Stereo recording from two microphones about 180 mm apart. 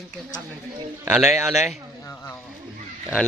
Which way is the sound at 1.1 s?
5° right (ahead or behind).